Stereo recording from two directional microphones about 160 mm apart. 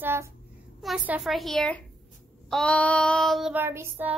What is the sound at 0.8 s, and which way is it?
A woman's voice, 5° right (ahead or behind).